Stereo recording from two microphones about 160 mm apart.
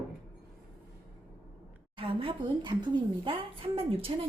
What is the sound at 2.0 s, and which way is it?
A woman's voice, 35° right (ahead or behind).